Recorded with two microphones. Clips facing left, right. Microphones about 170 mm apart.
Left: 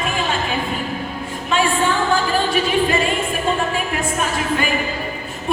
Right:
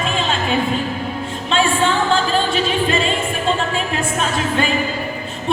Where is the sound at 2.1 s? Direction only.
25° right (ahead or behind).